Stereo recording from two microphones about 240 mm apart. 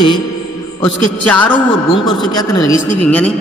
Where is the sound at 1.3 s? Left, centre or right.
Centre.